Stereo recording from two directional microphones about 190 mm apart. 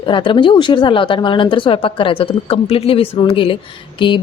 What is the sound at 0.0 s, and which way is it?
Speech, 25° left (ahead or behind).